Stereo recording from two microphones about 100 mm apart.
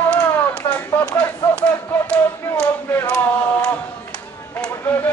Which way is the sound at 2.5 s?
10° left (ahead or behind).